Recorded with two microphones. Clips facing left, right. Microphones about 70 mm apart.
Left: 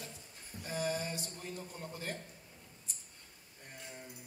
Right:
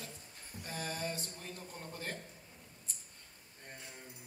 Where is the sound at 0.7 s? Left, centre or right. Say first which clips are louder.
Left 4 dB; centre.